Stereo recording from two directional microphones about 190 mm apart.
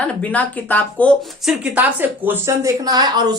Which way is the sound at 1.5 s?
10° right (ahead or behind).